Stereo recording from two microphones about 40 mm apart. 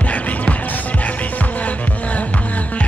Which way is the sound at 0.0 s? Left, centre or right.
Left.